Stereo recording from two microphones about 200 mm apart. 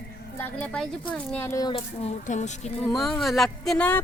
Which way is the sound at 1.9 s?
30° left (ahead or behind).